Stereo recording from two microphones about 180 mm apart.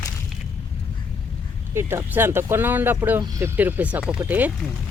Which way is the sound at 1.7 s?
15° right (ahead or behind).